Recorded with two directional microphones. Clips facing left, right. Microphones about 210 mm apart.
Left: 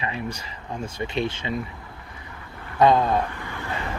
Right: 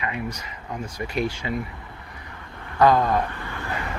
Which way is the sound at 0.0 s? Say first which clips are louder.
Even; 30° left (ahead or behind).